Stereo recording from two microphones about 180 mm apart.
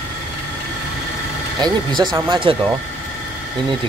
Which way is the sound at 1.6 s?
25° right (ahead or behind).